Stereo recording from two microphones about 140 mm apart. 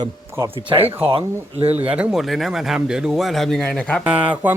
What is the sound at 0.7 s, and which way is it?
Speech, 15° right (ahead or behind).